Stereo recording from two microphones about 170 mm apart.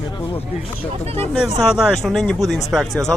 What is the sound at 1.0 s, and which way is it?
Speech, 35° right (ahead or behind).